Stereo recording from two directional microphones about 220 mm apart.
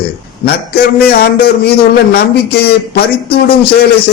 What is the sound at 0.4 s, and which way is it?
A man's voice, 45° left (ahead or behind).